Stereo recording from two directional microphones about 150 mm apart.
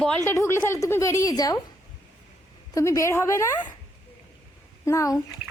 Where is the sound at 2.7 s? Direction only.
20° left (ahead or behind).